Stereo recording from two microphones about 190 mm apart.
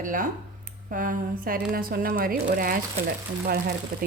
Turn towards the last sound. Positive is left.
turn(degrees=-55)  # may be behind; listen again after turning